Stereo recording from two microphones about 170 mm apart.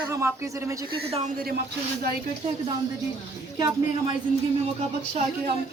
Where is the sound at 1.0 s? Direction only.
35° right (ahead or behind).